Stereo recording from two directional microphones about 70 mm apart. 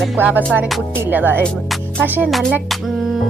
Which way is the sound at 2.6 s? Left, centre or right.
Centre.